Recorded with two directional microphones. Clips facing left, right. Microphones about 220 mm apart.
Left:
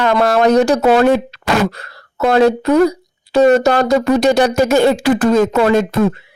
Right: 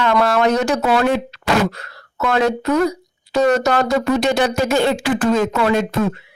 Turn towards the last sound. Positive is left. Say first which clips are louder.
# left 5 dB
turn(degrees=40)  # may be behind; listen again after turning